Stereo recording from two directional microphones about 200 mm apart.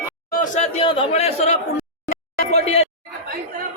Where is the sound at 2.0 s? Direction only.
35° left (ahead or behind).